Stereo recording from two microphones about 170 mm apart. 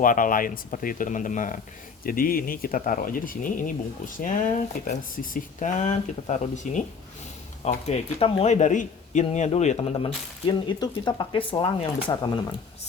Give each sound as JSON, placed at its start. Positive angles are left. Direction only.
{"t": 0.0, "sound": "speech", "side_deg": 50}